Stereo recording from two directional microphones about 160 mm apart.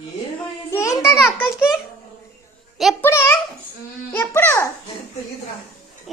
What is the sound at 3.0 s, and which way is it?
A child's voice, 15° left (ahead or behind).